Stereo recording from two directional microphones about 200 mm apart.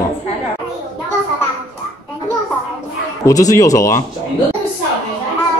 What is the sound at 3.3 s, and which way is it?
Speech, 15° left (ahead or behind).